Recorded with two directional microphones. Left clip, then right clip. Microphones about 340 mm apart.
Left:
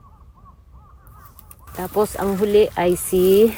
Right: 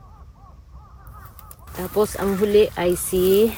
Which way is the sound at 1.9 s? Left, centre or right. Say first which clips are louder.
Left 1 dB; centre.